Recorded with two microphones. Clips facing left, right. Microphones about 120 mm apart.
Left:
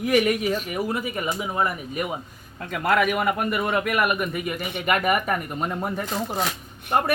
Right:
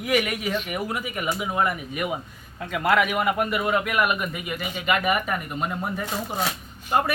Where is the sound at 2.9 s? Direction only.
50° left (ahead or behind).